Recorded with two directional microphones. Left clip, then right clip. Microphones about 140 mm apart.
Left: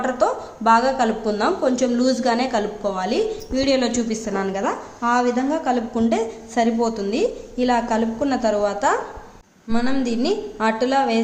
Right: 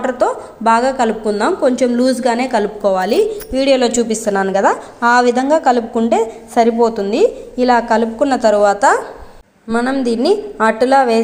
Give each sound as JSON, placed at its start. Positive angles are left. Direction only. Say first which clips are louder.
{"t": 0.0, "sound": "a woman's voice", "louder": "right 4 dB", "side_deg": -20}
{"t": 2.8, "sound": "a woman's voice", "louder": "right 9 dB", "side_deg": -50}
{"t": 3.5, "sound": "a woman's voice", "louder": "right 7 dB", "side_deg": -20}